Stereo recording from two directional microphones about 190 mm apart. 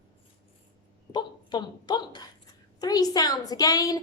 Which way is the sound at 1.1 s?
25° left (ahead or behind).